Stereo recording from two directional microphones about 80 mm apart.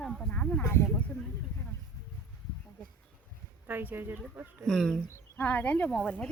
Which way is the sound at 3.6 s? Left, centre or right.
Right.